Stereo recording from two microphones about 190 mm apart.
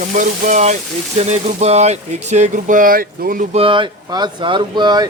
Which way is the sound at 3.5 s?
30° right (ahead or behind).